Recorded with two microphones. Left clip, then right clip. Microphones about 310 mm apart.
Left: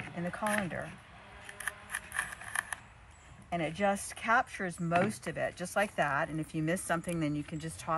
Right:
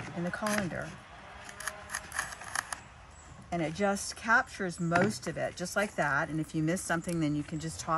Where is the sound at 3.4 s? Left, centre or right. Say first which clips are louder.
Even; centre.